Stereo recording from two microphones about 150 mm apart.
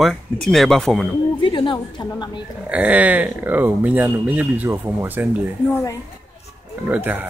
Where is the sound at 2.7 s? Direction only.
10° right (ahead or behind).